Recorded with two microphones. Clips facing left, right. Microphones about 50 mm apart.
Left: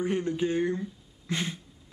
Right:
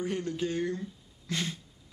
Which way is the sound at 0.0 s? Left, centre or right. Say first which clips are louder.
Left 4 dB; left.